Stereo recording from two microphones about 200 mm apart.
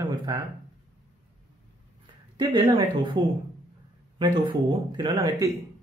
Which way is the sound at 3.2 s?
20° right (ahead or behind).